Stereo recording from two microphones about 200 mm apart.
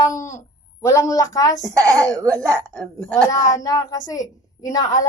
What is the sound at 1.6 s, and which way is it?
Speech, 15° right (ahead or behind).